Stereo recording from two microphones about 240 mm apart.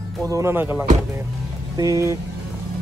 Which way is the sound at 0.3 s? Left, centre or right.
Centre.